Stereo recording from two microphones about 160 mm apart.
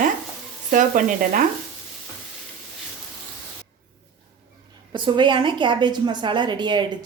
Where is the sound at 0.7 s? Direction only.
55° right (ahead or behind).